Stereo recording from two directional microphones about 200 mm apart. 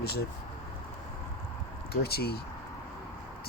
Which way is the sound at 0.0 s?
50° left (ahead or behind).